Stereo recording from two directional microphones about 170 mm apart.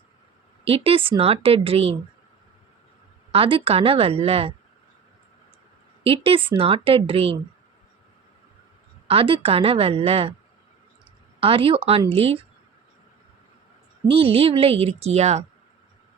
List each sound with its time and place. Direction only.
0.6 s speech: 35° right (ahead or behind)
3.3 s speech: 35° right (ahead or behind)
6.0 s speech: 30° right (ahead or behind)
9.0 s speech: 30° right (ahead or behind)
11.3 s speech: 30° right (ahead or behind)
14.1 s speech: 35° right (ahead or behind)